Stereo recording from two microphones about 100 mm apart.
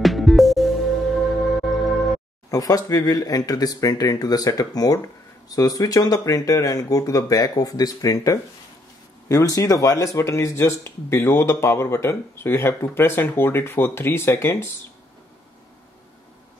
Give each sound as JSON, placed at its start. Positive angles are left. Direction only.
{"t": 0.0, "sound": "music", "side_deg": 0}
{"t": 2.5, "sound": "speech", "side_deg": 35}